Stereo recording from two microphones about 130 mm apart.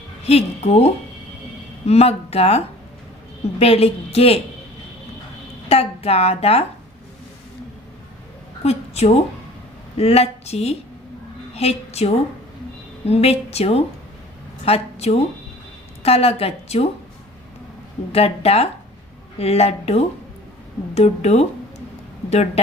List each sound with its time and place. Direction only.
0.3 s speech: 50° left (ahead or behind)
1.9 s speech: 50° left (ahead or behind)
3.6 s speech: 50° left (ahead or behind)
5.6 s speech: 50° left (ahead or behind)
8.6 s a woman's voice: 55° left (ahead or behind)
18.1 s speech: 50° left (ahead or behind)